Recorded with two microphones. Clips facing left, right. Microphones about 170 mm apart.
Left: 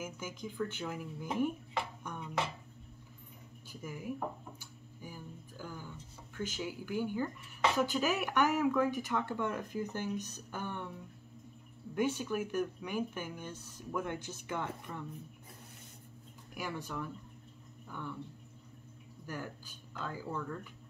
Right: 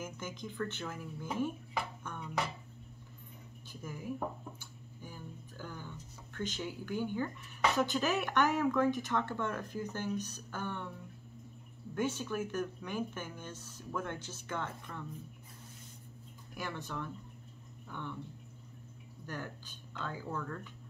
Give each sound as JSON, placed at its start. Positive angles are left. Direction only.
{"t": 0.0, "sound": "speech", "side_deg": 10}
{"t": 2.0, "sound": "music", "side_deg": 15}
{"t": 3.8, "sound": "speech", "side_deg": 10}
{"t": 4.6, "sound": "a sound", "side_deg": 10}
{"t": 7.7, "sound": "speech", "side_deg": 10}
{"t": 11.9, "sound": "speech", "side_deg": 15}
{"t": 16.5, "sound": "speech", "side_deg": 10}
{"t": 19.2, "sound": "speech", "side_deg": 10}